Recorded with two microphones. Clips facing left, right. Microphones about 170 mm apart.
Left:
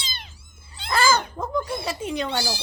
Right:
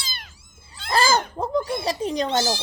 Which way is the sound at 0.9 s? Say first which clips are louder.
Right 1 dB; 35° right (ahead or behind).